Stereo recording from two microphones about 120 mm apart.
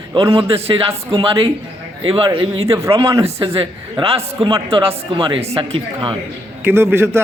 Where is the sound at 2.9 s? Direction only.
25° right (ahead or behind).